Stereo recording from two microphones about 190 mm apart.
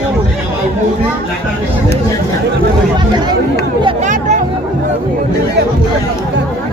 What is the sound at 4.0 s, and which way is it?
Speech, 40° right (ahead or behind).